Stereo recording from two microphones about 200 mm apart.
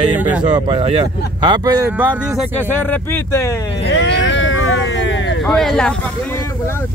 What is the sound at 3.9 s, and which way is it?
Vehicle, 60° left (ahead or behind).